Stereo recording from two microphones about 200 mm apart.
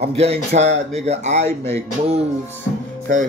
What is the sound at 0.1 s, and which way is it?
Speech, 30° right (ahead or behind).